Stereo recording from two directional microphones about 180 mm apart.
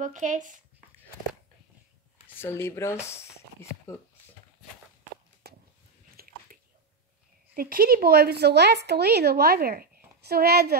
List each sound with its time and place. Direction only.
0.0 s speech: 45° right (ahead or behind)
2.2 s speech: 10° left (ahead or behind)
5.4 s a sound: 60° right (ahead or behind)
6.1 s biting: 55° right (ahead or behind)
7.7 s speech: 55° right (ahead or behind)